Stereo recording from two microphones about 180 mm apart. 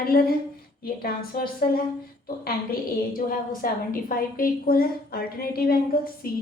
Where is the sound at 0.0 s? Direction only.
55° left (ahead or behind).